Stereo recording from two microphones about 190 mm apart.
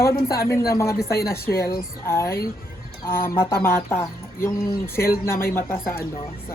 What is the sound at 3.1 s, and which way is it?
Speech, 50° left (ahead or behind).